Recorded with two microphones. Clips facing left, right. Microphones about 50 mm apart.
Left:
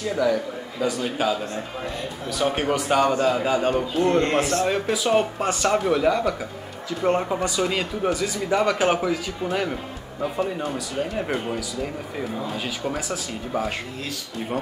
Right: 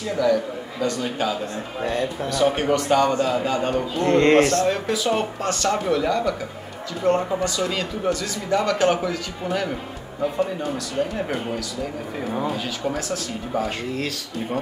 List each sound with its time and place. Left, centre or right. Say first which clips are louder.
0.2 s speech: right 3 dB; centre
2.3 s a man's voice: right 2 dB; centre
4.1 s a man's voice: right 8 dB; right
4.5 s a man's voice: right 1 dB; centre
12.8 s speech: right 2 dB; centre